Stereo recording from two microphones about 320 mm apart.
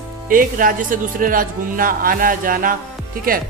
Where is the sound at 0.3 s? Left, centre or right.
Right.